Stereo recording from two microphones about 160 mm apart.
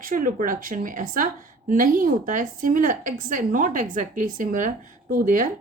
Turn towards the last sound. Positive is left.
turn(degrees=-55)  # may be behind; listen again after turning